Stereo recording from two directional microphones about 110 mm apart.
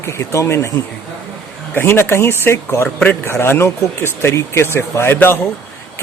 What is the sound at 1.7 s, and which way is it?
Speech, 20° left (ahead or behind).